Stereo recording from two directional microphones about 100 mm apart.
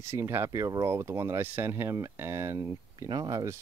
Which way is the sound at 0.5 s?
40° right (ahead or behind).